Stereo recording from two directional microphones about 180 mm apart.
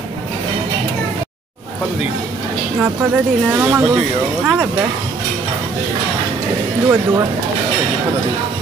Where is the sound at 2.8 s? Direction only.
10° right (ahead or behind).